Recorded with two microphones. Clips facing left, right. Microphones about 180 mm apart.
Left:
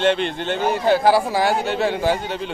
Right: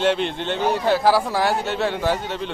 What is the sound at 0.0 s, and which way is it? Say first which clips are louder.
A man's voice: left 1 dB; 5° right (ahead or behind).